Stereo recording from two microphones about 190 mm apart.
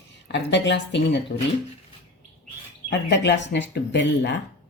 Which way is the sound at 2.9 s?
65° left (ahead or behind).